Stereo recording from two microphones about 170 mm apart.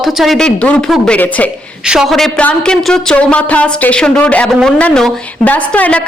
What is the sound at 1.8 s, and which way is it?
A woman's voice, 5° right (ahead or behind).